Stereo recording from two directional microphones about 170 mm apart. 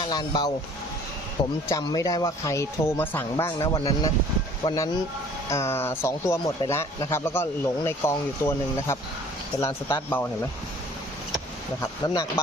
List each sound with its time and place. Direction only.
0.0 s speech: 25° left (ahead or behind)
1.6 s speech: 20° left (ahead or behind)
11.8 s speech: 20° left (ahead or behind)